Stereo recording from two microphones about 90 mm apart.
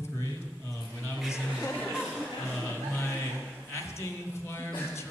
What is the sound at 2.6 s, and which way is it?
Music, 25° left (ahead or behind).